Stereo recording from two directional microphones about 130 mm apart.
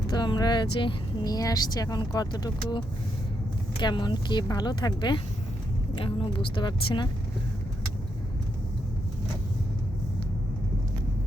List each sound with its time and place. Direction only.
0.1 s speech: 30° left (ahead or behind)